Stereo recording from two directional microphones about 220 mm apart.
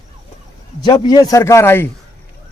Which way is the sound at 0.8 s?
20° left (ahead or behind).